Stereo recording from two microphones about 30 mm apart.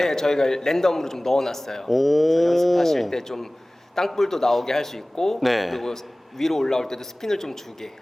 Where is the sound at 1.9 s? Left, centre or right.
Centre.